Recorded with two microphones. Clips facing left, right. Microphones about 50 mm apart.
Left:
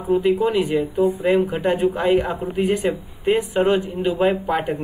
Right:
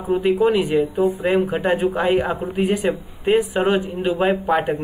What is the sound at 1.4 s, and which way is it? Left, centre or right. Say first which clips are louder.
Speech: even; centre.